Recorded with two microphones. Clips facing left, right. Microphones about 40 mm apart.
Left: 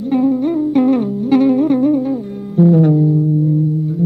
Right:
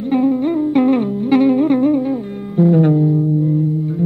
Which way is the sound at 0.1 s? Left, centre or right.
Right.